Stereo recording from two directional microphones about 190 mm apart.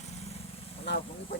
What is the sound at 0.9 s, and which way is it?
Vehicle, 65° left (ahead or behind).